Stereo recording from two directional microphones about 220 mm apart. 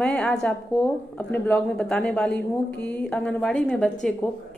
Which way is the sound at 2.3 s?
50° left (ahead or behind).